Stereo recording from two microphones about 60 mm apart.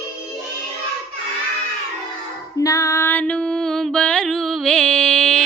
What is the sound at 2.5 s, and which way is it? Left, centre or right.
Music, left.